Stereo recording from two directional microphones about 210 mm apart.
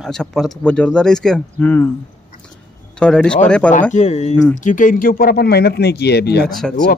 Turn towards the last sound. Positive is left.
turn(degrees=0)  # may be behind; listen again after turning